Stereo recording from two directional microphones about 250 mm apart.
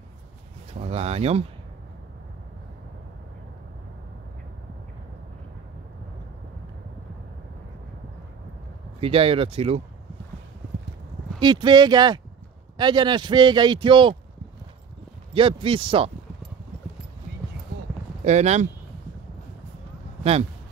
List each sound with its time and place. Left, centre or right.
0.7 s a man's voice: right
9.0 s a man's voice: right
11.3 s a man's voice: centre
15.3 s a man's voice: right
18.2 s a man's voice: right